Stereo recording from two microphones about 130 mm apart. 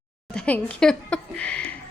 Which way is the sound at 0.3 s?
10° left (ahead or behind).